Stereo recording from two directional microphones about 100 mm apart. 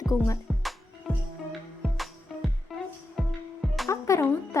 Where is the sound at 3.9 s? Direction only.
30° left (ahead or behind).